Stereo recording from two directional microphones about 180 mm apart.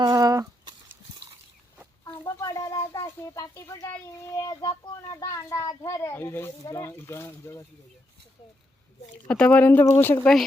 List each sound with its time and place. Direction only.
0.0 s a sound: 20° right (ahead or behind)
2.2 s a child's voice: 20° left (ahead or behind)
9.3 s a child's voice: 5° left (ahead or behind)